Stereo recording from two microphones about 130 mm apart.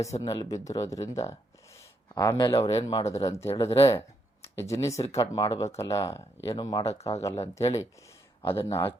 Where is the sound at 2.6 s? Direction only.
50° left (ahead or behind).